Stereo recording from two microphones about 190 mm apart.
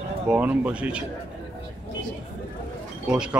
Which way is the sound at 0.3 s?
5° right (ahead or behind).